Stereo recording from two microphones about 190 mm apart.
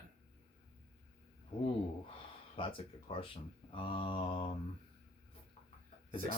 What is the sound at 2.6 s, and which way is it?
Speech, 25° left (ahead or behind).